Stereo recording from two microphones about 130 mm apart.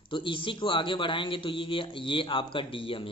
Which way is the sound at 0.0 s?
40° left (ahead or behind).